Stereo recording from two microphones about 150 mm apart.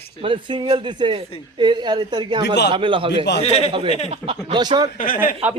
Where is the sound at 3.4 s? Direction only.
45° left (ahead or behind).